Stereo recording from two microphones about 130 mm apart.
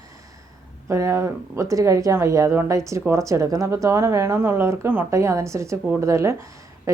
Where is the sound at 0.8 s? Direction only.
20° right (ahead or behind).